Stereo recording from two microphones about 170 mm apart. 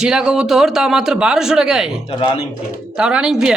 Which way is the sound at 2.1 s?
30° left (ahead or behind).